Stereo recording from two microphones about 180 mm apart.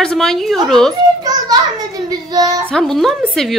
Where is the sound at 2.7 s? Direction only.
Centre (ahead or behind).